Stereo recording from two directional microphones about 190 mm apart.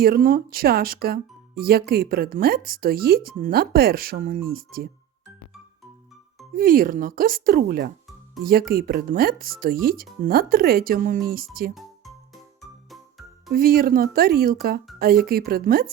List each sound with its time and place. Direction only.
0.0 s speech: 50° right (ahead or behind)
6.6 s speech: 45° right (ahead or behind)
13.5 s speech: 50° right (ahead or behind)